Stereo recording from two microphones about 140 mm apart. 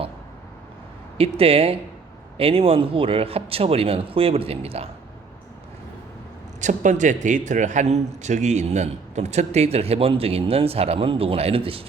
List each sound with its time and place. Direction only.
1.2 s a man's voice: 45° right (ahead or behind)
6.6 s a man's voice: 60° right (ahead or behind); by 11.8 s 40° right (ahead or behind)